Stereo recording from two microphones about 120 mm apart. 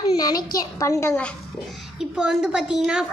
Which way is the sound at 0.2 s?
30° left (ahead or behind).